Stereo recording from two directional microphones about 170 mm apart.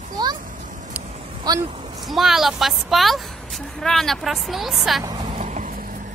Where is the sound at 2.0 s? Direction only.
Centre (ahead or behind).